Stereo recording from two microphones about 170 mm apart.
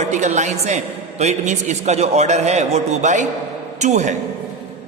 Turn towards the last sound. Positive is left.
turn(degrees=-45)  # may be behind; listen again after turning